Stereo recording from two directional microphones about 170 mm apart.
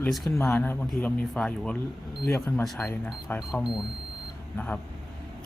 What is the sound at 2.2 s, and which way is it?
Speech, 15° left (ahead or behind).